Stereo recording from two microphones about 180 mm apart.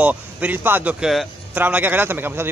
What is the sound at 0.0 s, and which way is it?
Speech, 10° right (ahead or behind).